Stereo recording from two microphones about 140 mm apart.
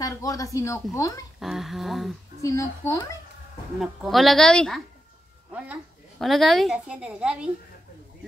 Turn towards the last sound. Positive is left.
turn(degrees=-5)  # may be behind; listen again after turning